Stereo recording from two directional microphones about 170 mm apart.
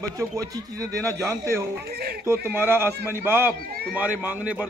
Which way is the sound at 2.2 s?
15° right (ahead or behind).